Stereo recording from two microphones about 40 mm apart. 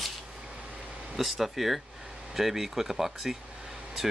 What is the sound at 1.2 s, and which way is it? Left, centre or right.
Speech, centre.